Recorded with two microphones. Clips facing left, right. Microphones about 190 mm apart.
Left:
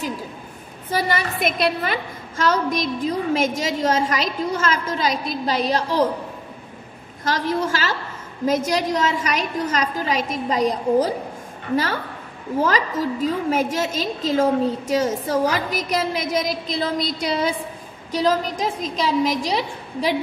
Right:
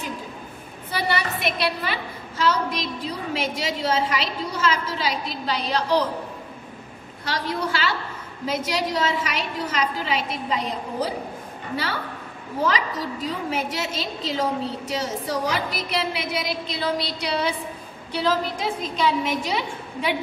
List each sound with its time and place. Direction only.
0.9 s a woman's voice: 45° left (ahead or behind)
7.2 s a woman's voice: 45° left (ahead or behind)